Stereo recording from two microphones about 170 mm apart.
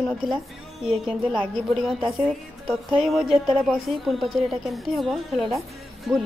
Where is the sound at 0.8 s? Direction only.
5° right (ahead or behind).